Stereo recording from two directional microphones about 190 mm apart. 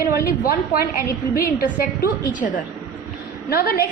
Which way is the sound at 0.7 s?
50° left (ahead or behind).